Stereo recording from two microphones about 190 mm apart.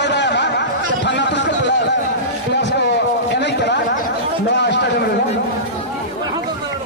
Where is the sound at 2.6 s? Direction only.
65° left (ahead or behind).